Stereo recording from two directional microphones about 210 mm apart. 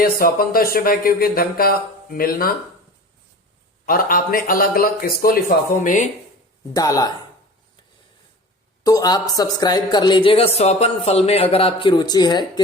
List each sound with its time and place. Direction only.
0.0 s speech: 45° left (ahead or behind)
3.8 s speech: 40° left (ahead or behind)
6.7 s speech: 15° left (ahead or behind)
8.8 s a woman's voice: 20° left (ahead or behind)